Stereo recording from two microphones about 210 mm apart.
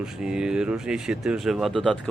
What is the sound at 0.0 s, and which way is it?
Speech, 5° right (ahead or behind).